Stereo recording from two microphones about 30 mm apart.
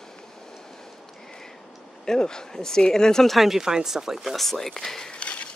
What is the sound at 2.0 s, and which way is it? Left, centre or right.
Speech, left.